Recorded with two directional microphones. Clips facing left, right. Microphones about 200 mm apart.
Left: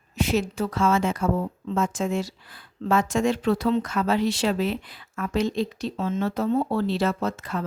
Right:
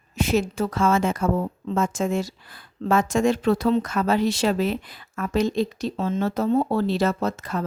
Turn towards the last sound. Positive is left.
turn(degrees=-40)  # may be behind; listen again after turning